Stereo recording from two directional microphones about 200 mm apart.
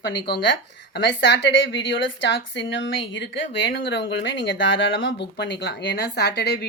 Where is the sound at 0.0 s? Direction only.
55° left (ahead or behind).